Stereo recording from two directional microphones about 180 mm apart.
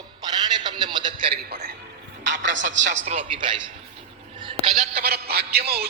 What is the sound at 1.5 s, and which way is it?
Music, 55° right (ahead or behind).